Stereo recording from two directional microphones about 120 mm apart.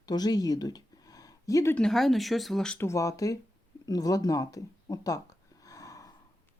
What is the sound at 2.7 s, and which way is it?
Speech, 25° left (ahead or behind).